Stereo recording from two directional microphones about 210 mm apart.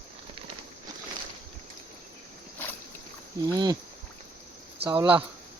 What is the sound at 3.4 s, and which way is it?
Speech, 20° right (ahead or behind).